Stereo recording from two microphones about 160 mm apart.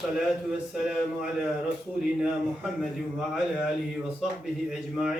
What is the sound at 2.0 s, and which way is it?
A man's voice, 5° right (ahead or behind).